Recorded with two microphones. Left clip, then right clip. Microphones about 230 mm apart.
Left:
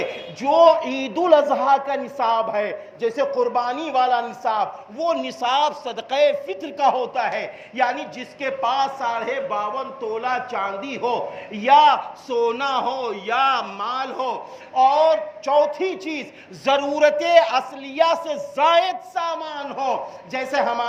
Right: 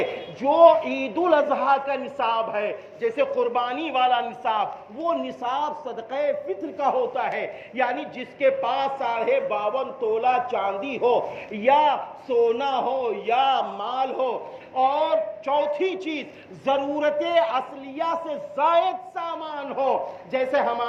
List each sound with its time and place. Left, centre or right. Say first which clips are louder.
0.4 s a man's voice: left 1 dB; left